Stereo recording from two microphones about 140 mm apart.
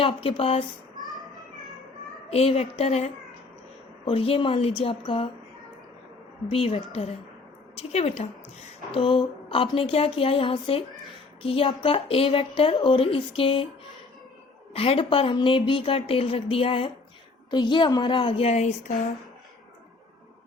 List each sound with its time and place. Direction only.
0.0 s a woman's voice: 40° left (ahead or behind)
2.3 s a woman's voice: 45° left (ahead or behind)
6.5 s speech: 40° left (ahead or behind)
9.0 s a woman's voice: 35° left (ahead or behind)
14.7 s a woman's voice: 45° left (ahead or behind)